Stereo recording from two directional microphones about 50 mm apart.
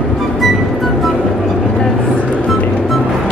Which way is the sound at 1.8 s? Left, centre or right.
Centre.